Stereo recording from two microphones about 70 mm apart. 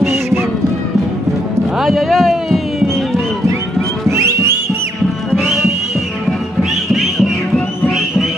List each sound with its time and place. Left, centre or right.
0.0 s music: right
1.8 s music: centre
4.1 s music: right
5.3 s music: centre